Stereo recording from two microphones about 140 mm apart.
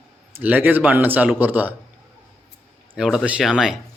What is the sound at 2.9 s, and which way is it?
Speech, 5° right (ahead or behind).